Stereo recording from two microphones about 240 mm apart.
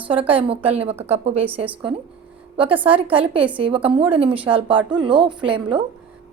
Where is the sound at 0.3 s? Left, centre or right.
Right.